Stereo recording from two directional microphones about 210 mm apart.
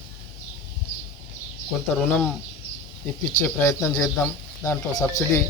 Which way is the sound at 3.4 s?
10° left (ahead or behind).